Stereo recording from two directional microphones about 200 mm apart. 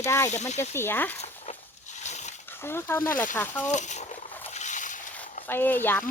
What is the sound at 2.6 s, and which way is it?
Speech, 10° left (ahead or behind).